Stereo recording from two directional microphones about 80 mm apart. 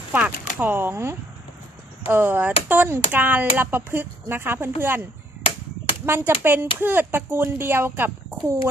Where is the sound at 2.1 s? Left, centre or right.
Right.